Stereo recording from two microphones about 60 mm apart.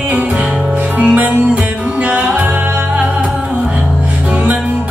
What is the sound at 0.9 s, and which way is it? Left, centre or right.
Music, right.